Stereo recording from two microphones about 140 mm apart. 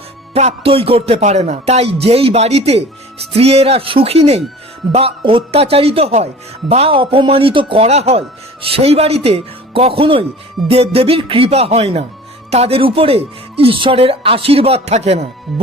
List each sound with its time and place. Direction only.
0.3 s speech: 45° right (ahead or behind)